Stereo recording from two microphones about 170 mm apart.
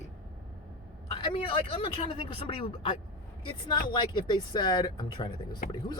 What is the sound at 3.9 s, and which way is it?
A woman's voice, 25° left (ahead or behind).